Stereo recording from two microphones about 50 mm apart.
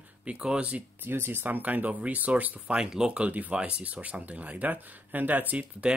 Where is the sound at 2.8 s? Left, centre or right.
Centre.